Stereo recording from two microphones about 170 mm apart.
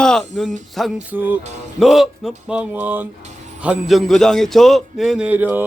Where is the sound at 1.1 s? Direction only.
10° right (ahead or behind).